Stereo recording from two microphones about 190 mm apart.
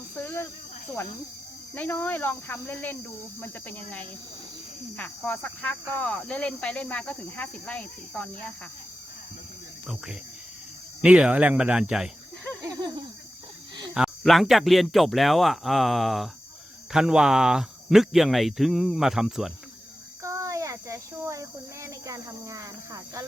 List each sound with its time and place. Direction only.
0.2 s cricket: 10° left (ahead or behind)
1.7 s speech: 10° left (ahead or behind)
11.0 s speech: 5° right (ahead or behind)
13.9 s speech: centre (ahead or behind)
20.2 s a sound: 15° right (ahead or behind)